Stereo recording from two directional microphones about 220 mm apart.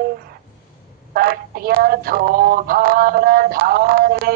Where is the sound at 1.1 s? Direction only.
40° right (ahead or behind).